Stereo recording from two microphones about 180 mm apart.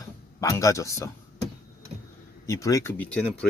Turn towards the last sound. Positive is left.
turn(degrees=10)  # may be behind; listen again after turning